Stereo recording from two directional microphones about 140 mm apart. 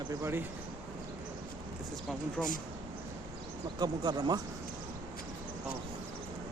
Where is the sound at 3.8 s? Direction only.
30° right (ahead or behind).